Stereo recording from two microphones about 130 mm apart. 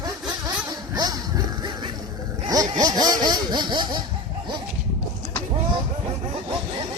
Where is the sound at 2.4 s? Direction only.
30° right (ahead or behind).